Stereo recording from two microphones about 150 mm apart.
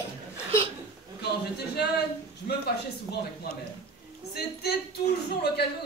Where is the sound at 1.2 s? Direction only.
90° left.